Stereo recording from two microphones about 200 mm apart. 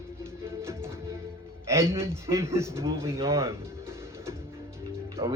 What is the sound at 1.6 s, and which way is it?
A man's voice, 15° right (ahead or behind).